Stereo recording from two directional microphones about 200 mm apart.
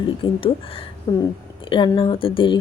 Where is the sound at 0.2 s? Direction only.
25° left (ahead or behind).